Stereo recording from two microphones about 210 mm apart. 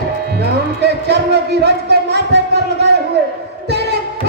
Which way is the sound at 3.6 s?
50° right (ahead or behind).